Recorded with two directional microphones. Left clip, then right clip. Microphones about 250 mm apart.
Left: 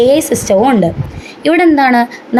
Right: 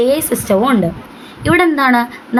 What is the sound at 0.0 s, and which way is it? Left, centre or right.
A woman's voice, centre.